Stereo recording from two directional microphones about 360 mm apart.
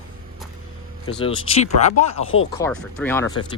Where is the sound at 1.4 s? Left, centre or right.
Centre.